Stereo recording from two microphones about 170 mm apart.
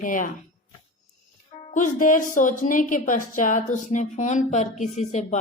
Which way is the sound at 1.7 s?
50° left (ahead or behind).